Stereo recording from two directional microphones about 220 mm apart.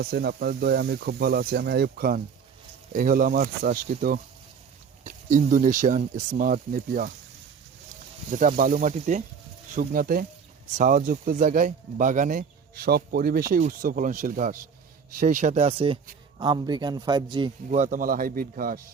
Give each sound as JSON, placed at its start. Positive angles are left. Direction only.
{"t": 0.0, "sound": "speech", "side_deg": -45}
{"t": 8.3, "sound": "a man's voice", "side_deg": -35}
{"t": 17.7, "sound": "speech", "side_deg": -35}